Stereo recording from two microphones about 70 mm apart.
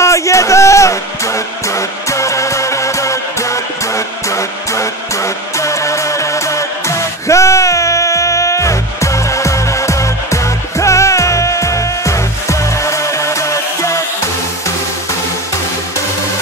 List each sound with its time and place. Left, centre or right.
0.0 s music: left